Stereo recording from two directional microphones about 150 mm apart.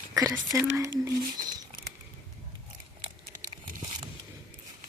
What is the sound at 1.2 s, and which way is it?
Rodents, 70° right (ahead or behind).